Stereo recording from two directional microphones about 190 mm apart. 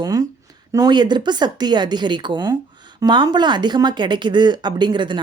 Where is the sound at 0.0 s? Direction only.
20° right (ahead or behind).